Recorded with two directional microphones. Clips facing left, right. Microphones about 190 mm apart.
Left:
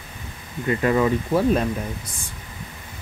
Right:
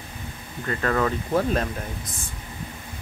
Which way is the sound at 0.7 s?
15° left (ahead or behind).